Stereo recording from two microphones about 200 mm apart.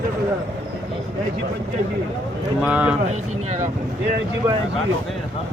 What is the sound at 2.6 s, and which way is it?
Speech, 5° right (ahead or behind).